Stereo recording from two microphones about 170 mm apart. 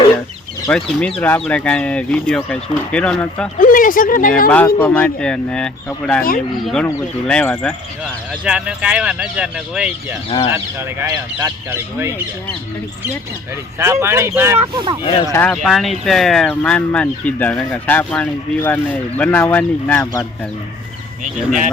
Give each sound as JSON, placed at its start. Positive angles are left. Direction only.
{"t": 0.7, "sound": "speech", "side_deg": 5}
{"t": 3.6, "sound": "speech", "side_deg": 55}
{"t": 4.4, "sound": "speech", "side_deg": 10}
{"t": 10.2, "sound": "speech", "side_deg": 35}
{"t": 10.5, "sound": "speech", "side_deg": -15}
{"t": 13.7, "sound": "speech", "side_deg": -15}
{"t": 14.6, "sound": "speech", "side_deg": -30}
{"t": 15.3, "sound": "speech", "side_deg": 10}